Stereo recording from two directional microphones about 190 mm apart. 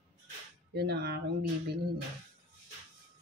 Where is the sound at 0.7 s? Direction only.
60° right (ahead or behind).